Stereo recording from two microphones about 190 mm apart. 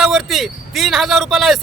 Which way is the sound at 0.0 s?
Centre (ahead or behind).